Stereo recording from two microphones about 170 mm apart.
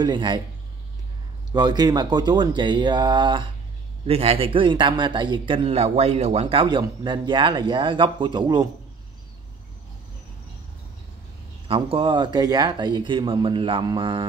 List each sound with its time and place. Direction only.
0.0 s speech: 25° right (ahead or behind)
1.5 s speech: 25° right (ahead or behind)
11.6 s speech: 30° right (ahead or behind)